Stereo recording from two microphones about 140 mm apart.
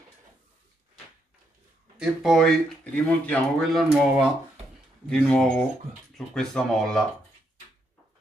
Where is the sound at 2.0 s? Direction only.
Centre (ahead or behind).